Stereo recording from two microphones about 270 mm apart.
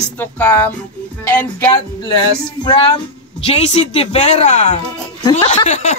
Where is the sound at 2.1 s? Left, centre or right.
Centre.